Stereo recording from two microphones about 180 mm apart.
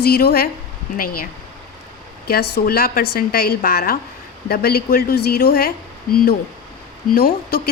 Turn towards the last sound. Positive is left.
turn(degrees=55)  # may be behind; listen again after turning